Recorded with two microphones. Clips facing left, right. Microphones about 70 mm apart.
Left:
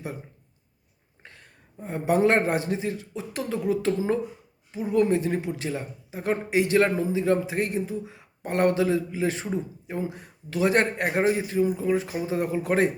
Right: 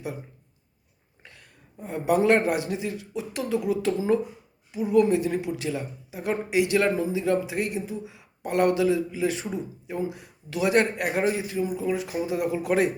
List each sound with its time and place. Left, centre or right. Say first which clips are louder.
1.2 s a man's voice: left 1 dB; left